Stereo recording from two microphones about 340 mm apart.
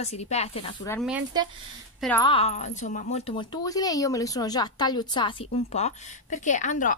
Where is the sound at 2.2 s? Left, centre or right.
Centre.